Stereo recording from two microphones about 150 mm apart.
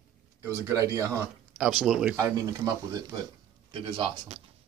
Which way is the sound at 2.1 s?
20° right (ahead or behind).